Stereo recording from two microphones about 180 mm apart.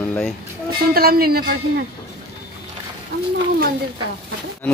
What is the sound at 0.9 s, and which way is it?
Speech, 55° right (ahead or behind).